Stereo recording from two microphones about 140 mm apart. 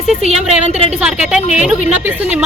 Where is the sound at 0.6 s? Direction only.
50° right (ahead or behind).